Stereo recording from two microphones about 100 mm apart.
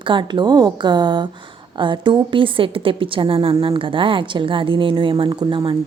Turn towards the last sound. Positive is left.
turn(degrees=-55)  # may be behind; listen again after turning